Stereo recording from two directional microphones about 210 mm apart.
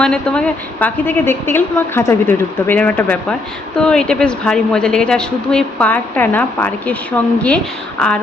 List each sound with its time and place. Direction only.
0.0 s a woman's voice: 5° left (ahead or behind)